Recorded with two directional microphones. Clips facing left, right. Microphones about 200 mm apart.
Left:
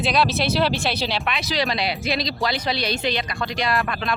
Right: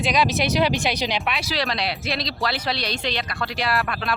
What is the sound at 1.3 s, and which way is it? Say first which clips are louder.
Speech: left 2 dB; 5° right (ahead or behind).